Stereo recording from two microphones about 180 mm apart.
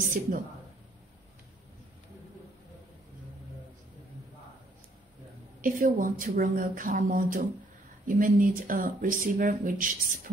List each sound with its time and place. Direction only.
0.0 s speech: 45° right (ahead or behind)
5.6 s speech: 45° right (ahead or behind)